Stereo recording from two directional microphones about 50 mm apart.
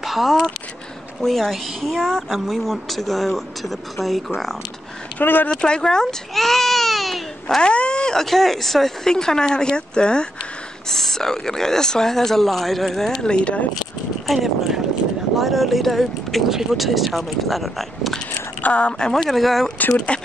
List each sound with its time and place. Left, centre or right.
0.0 s a sound: centre
1.2 s speech: centre
5.2 s speech: left
5.5 s speech: centre
7.4 s speech: centre
10.9 s speech: centre
13.3 s speech: left
14.2 s speech: centre
18.6 s speech: left
19.2 s speech: centre
20.1 s speech: left